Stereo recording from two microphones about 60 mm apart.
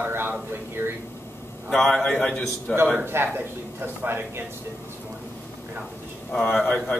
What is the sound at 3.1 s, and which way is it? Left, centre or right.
Speech, right.